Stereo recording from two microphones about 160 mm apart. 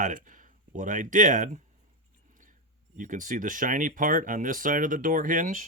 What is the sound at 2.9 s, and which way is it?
Speech, 55° right (ahead or behind).